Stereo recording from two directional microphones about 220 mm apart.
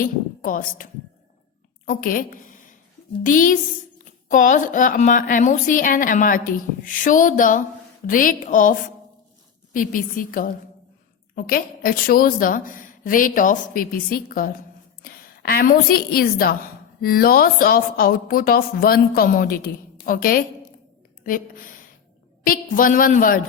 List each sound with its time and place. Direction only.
0.0 s a woman's voice: 40° left (ahead or behind)
9.7 s a woman's voice: 40° left (ahead or behind)